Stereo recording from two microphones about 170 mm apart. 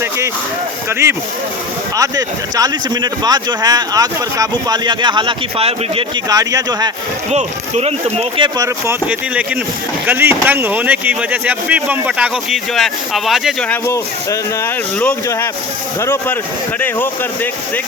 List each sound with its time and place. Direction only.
0.9 s speech: 15° right (ahead or behind); by 6.1 s 35° right (ahead or behind)
6.2 s speech: 20° right (ahead or behind)
7.3 s speech: 40° right (ahead or behind)
8.5 s speech: 20° right (ahead or behind)
10.1 s speech: 10° right (ahead or behind)
13.8 s speech: 15° left (ahead or behind)